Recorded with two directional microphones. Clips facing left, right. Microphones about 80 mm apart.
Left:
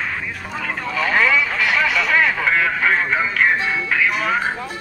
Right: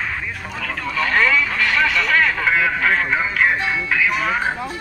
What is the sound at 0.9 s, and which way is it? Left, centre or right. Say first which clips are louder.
Speech: even; centre.